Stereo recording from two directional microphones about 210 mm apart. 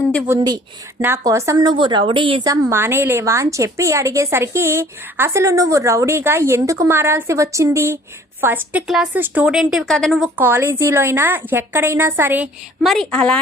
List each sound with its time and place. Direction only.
0.3 s speech: 20° right (ahead or behind); by 13.4 s 5° left (ahead or behind)